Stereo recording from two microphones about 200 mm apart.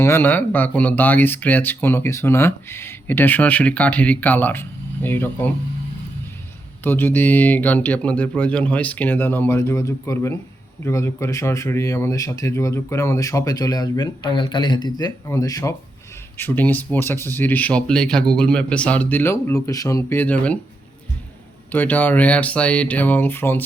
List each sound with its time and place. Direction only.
0.0 s speech: 10° left (ahead or behind)
6.8 s speech: 10° left (ahead or behind)
21.7 s speech: 10° left (ahead or behind)